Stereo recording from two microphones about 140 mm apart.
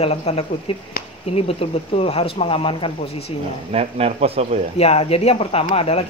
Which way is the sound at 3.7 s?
45° right (ahead or behind).